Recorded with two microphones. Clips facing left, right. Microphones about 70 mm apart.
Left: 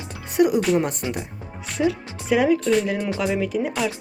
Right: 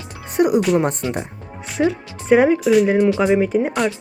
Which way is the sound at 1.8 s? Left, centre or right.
Right.